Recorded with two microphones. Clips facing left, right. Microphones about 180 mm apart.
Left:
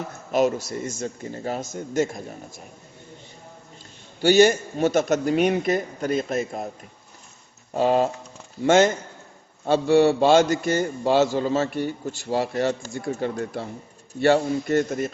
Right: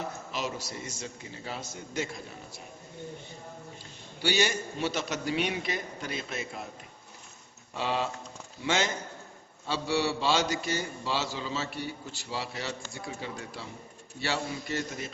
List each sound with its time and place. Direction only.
0.3 s a man's voice: 50° left (ahead or behind)
4.2 s a man's voice: 45° left (ahead or behind)
7.7 s a man's voice: 45° left (ahead or behind)